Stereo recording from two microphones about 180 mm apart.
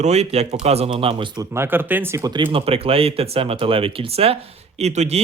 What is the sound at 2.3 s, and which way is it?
Speech, 30° right (ahead or behind).